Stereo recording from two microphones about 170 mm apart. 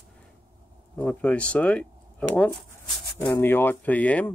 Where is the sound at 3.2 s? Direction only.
15° left (ahead or behind).